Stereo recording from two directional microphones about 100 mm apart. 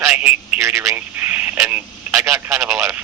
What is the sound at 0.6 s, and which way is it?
Telephone, 30° right (ahead or behind).